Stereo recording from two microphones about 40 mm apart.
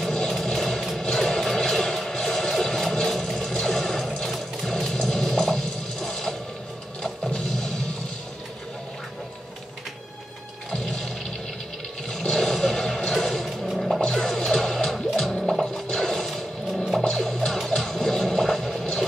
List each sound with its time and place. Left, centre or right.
0.5 s vehicle: centre
1.0 s music: centre
10.7 s toilet flush: centre
12.1 s music: centre
15.6 s a sound: centre
16.7 s music: centre